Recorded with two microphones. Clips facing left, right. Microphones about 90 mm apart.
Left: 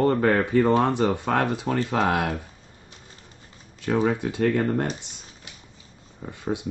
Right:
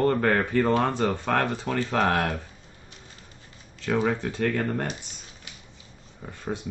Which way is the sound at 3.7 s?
15° left (ahead or behind).